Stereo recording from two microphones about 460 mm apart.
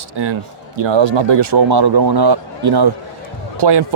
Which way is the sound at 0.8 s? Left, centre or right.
Right.